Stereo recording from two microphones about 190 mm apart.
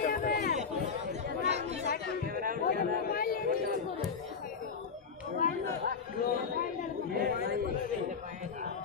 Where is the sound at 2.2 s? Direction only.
50° right (ahead or behind).